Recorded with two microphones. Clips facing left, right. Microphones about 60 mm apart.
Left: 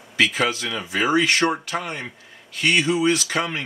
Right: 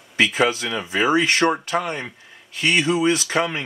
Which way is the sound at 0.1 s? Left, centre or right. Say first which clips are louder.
Right 2 dB; right.